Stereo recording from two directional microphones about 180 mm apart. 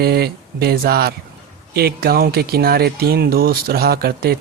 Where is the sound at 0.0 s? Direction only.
60° right (ahead or behind).